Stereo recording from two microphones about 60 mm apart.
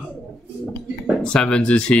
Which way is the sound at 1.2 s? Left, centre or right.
Centre.